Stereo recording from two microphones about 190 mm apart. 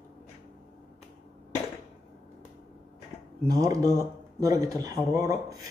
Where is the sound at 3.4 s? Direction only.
20° right (ahead or behind).